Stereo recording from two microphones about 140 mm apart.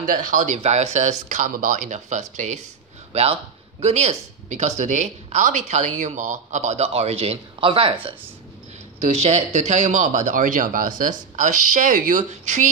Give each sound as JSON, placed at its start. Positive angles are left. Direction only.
{"t": 0.0, "sound": "a man's voice", "side_deg": -75}
{"t": 9.0, "sound": "speech", "side_deg": -50}